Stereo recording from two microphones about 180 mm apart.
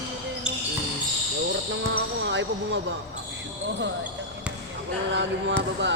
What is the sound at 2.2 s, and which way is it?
Speech, 90° right.